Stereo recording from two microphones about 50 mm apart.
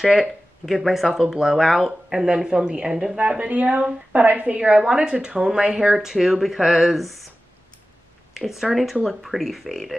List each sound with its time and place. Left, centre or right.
0.0 s speech: centre
2.2 s a woman's voice: centre; by 4.6 s right
4.6 s speech: centre
8.4 s speech: centre